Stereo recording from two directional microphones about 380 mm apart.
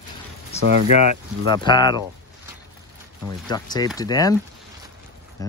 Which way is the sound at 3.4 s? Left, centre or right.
Centre.